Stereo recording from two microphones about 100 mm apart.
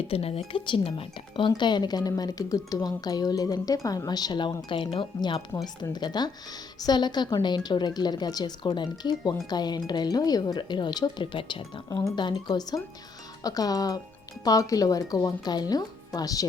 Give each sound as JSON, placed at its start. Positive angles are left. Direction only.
{"t": 0.1, "sound": "speech", "side_deg": 80}
{"t": 0.6, "sound": "speech", "side_deg": 55}
{"t": 4.7, "sound": "speech", "side_deg": 60}
{"t": 5.5, "sound": "speech", "side_deg": 35}
{"t": 6.0, "sound": "speech", "side_deg": 45}